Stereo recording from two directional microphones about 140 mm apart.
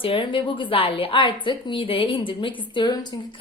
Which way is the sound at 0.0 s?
40° left (ahead or behind).